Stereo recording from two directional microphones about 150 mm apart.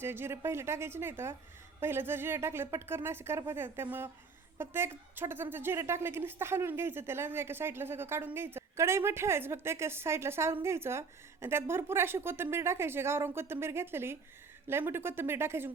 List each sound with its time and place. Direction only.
0.0 s a woman's voice: 15° right (ahead or behind)